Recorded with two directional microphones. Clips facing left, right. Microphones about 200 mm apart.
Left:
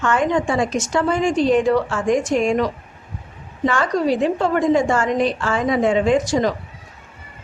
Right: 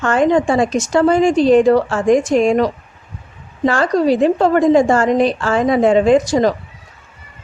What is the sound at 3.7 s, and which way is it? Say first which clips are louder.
Speech: right 5 dB; 35° right (ahead or behind).